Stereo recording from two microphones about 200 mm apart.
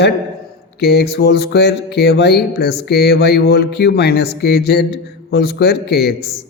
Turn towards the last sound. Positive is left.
turn(degrees=55)  # may be behind; listen again after turning